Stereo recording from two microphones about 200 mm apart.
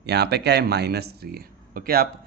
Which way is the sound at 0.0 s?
55° right (ahead or behind).